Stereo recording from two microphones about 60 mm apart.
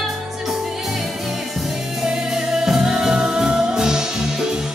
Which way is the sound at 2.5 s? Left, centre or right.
Centre.